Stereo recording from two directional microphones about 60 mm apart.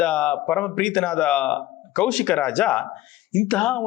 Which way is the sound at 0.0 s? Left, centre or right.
Centre.